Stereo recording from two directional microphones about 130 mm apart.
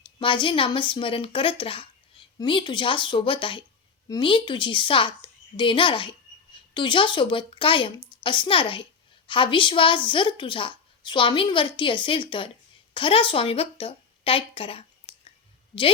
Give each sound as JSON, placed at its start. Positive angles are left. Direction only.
{"t": 0.2, "sound": "a woman's voice", "side_deg": 40}